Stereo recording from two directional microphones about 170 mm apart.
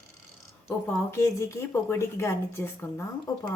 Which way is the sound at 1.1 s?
15° left (ahead or behind).